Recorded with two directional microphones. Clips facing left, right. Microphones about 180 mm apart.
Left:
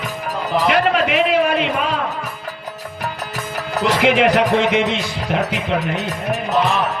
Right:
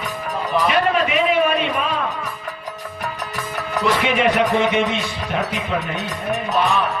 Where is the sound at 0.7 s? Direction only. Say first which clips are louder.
Left 3 dB; 90° left.